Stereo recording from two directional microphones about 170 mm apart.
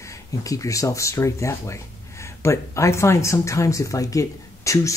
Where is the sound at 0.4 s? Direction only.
20° left (ahead or behind).